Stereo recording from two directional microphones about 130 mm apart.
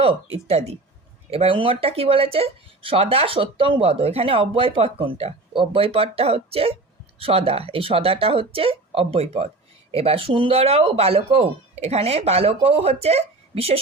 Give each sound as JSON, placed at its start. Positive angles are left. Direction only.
{"t": 0.0, "sound": "speech", "side_deg": -50}